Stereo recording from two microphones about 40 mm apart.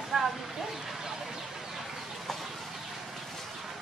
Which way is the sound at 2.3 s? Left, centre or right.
Centre.